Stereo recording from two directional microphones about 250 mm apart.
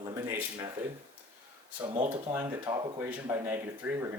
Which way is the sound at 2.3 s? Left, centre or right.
Centre.